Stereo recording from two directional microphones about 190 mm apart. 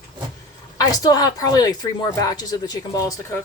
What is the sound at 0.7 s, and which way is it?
A woman's voice, 20° left (ahead or behind).